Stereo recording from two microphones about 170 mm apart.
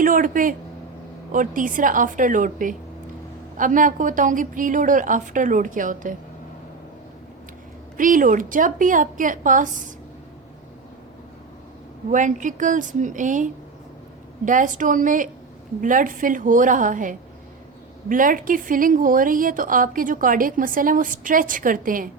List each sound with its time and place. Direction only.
0.0 s a woman's voice: 55° right (ahead or behind)
7.9 s a woman's voice: 50° right (ahead or behind)
12.1 s a woman's voice: 50° right (ahead or behind)